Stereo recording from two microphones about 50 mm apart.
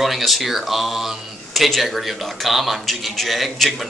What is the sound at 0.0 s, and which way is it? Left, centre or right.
Speech, centre.